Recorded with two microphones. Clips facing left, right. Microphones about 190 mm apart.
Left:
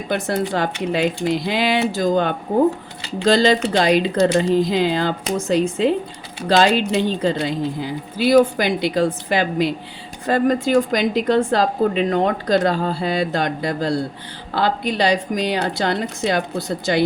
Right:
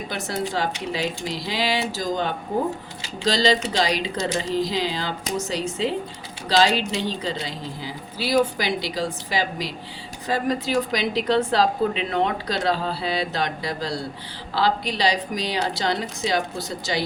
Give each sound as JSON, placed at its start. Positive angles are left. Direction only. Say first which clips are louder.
{"t": 0.1, "sound": "a woman's voice", "louder": "left 7 dB", "side_deg": 55}